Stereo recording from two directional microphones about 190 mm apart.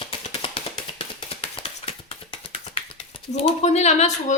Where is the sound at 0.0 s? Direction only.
30° left (ahead or behind).